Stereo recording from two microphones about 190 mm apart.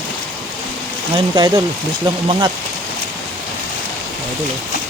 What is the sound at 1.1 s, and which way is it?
Speech, 20° right (ahead or behind).